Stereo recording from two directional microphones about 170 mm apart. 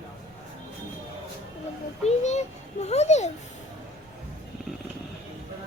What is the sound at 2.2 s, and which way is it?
A child's voice, 40° left (ahead or behind).